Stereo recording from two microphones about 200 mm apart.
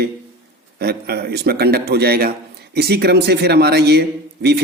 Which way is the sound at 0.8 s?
50° right (ahead or behind).